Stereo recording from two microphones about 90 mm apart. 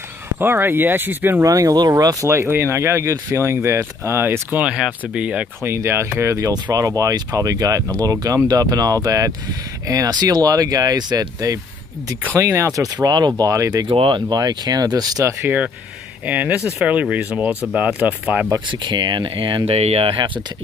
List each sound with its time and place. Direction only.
0.4 s speech: 25° right (ahead or behind)
1.4 s speech: 40° right (ahead or behind); by 5.5 s 15° right (ahead or behind)
5.6 s speech: 25° right (ahead or behind); by 13.5 s 50° right (ahead or behind)
13.8 s speech: 70° right (ahead or behind)
14.3 s speech: 50° right (ahead or behind)
15.4 s speech: 15° right (ahead or behind)
18.7 s speech: 60° right (ahead or behind)